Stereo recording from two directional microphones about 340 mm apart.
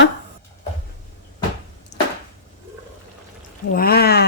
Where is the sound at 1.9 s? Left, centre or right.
Left.